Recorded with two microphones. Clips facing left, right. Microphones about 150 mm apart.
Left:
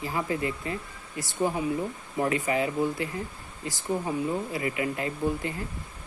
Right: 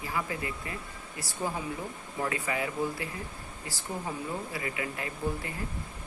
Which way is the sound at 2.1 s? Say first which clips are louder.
Left 6 dB; 25° left (ahead or behind).